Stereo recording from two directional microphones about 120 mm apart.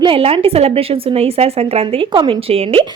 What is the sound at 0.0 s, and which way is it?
A woman's voice, 50° right (ahead or behind).